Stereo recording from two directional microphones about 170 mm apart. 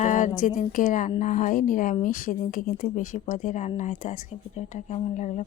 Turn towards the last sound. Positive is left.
turn(degrees=45)  # may be behind; listen again after turning